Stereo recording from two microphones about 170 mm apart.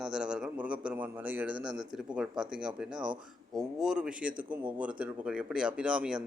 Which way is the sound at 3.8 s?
5° right (ahead or behind).